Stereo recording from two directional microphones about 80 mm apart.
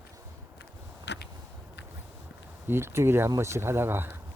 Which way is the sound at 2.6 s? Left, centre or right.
Right.